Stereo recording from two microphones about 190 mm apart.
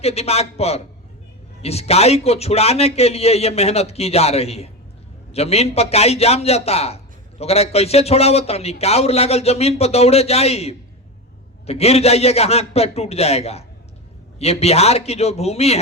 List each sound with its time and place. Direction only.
0.0 s a man's voice: 35° left (ahead or behind)